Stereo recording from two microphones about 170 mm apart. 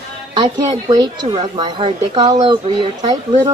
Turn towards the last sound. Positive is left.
turn(degrees=-25)  # may be behind; listen again after turning